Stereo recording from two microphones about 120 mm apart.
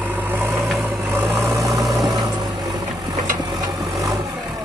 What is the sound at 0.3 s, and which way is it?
Vehicle, 15° right (ahead or behind).